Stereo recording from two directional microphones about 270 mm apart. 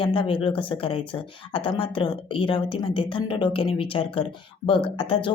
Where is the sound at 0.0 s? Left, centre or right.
Centre.